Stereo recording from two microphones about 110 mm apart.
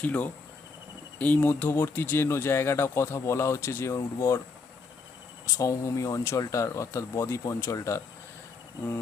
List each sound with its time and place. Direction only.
0.0 s speech: 15° left (ahead or behind)
5.5 s speech: 30° left (ahead or behind)